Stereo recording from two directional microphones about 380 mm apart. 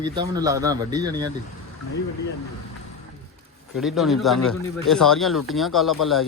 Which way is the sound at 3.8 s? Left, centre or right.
Centre.